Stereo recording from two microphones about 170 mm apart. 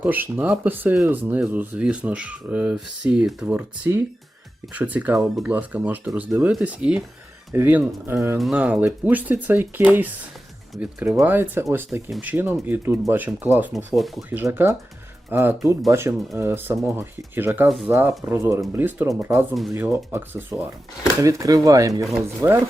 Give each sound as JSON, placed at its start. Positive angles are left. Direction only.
{"t": 0.0, "sound": "speech", "side_deg": -10}
{"t": 8.4, "sound": "speech", "side_deg": -5}
{"t": 14.3, "sound": "speech", "side_deg": -10}